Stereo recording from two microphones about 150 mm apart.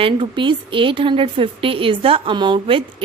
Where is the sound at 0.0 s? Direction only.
35° right (ahead or behind).